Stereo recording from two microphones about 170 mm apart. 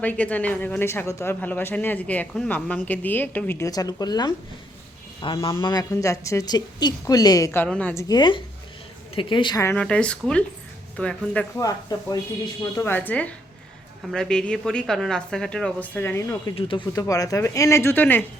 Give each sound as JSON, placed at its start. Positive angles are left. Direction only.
{"t": 0.0, "sound": "a woman's voice", "side_deg": 10}
{"t": 8.0, "sound": "a woman's voice", "side_deg": 25}
{"t": 9.7, "sound": "a woman's voice", "side_deg": 5}
{"t": 11.5, "sound": "a woman's voice", "side_deg": 20}
{"t": 16.6, "sound": "speech", "side_deg": 30}
{"t": 16.9, "sound": "speech", "side_deg": 20}